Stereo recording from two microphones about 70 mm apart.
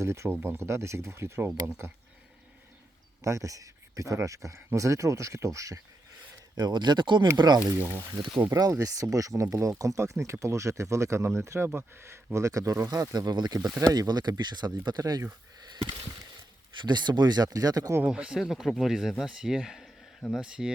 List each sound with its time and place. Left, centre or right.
0.0 s speech: right
3.2 s speech: right
6.6 s speech: right
7.8 s speech: right
8.8 s speech: right
13.1 s speech: right
13.7 s speech: right
15.6 s a sound: right
16.8 s speech: right
18.0 s speech: centre
18.3 s speech: centre